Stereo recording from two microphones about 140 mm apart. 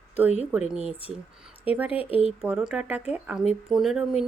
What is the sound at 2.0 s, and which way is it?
Speech, 40° left (ahead or behind).